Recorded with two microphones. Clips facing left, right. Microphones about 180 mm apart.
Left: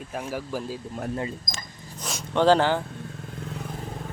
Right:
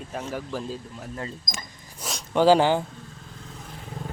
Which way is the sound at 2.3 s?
10° right (ahead or behind).